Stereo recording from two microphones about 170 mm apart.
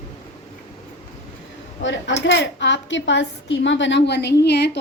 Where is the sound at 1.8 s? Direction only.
90° left.